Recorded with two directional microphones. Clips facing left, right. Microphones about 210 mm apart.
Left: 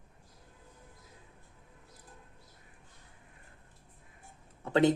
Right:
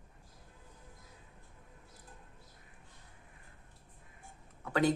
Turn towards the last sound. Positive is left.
turn(degrees=25)  # may be behind; listen again after turning